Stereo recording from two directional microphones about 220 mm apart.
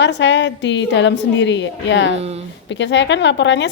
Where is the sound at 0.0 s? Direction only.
55° left (ahead or behind).